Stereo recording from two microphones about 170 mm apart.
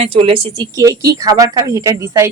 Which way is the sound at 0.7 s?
20° right (ahead or behind).